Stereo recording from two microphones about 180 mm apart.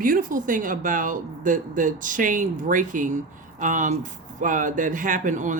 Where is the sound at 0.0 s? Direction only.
50° right (ahead or behind).